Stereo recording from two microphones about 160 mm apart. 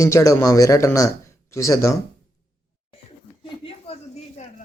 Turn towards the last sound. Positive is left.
turn(degrees=35)  # may be behind; listen again after turning